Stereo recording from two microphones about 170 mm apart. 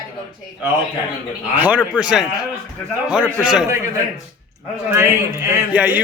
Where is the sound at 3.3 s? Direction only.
5° right (ahead or behind).